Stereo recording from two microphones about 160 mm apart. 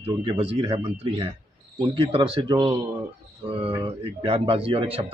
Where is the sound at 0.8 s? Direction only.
30° right (ahead or behind).